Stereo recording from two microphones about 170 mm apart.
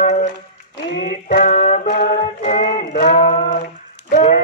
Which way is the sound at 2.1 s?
40° left (ahead or behind).